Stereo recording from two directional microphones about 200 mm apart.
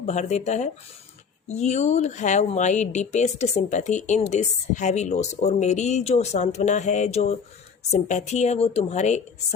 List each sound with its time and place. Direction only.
0.0 s speech: 35° left (ahead or behind)